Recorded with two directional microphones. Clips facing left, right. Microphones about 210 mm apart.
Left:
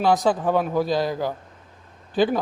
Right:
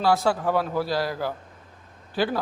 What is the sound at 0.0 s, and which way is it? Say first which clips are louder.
A man's voice: left 2 dB; 20° left (ahead or behind).